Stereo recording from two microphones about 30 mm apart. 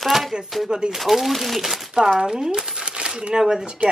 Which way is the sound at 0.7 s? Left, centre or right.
Right.